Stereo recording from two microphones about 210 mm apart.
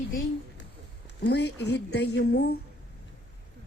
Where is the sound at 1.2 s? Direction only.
55° left (ahead or behind).